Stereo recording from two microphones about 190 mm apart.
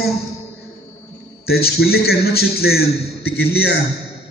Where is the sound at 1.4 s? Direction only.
55° left (ahead or behind).